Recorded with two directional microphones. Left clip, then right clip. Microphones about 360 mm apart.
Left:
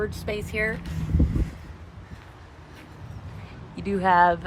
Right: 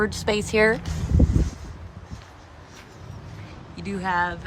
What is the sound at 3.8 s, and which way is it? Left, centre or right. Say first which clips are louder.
Speech: left 6 dB; centre.